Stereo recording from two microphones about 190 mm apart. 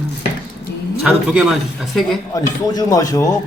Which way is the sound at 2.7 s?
20° left (ahead or behind).